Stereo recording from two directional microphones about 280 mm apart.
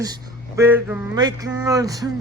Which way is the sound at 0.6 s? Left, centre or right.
Centre.